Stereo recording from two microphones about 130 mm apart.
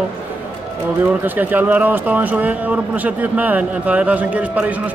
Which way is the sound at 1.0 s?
15° right (ahead or behind).